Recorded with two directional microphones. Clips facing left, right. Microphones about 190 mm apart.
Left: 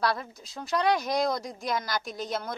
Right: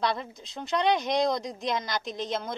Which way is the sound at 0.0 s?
20° right (ahead or behind).